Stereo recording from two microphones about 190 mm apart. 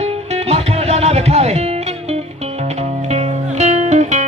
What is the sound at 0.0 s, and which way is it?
Music, 35° right (ahead or behind).